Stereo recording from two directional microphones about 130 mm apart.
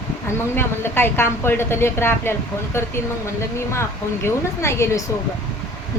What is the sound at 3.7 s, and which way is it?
A woman's voice, 20° left (ahead or behind).